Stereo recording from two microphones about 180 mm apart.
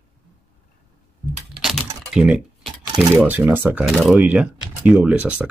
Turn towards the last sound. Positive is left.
turn(degrees=-10)  # may be behind; listen again after turning